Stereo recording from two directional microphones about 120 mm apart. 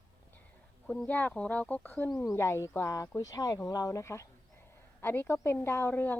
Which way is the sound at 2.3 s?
25° left (ahead or behind).